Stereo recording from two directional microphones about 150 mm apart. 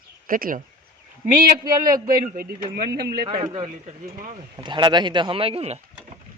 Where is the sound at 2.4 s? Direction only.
80° right.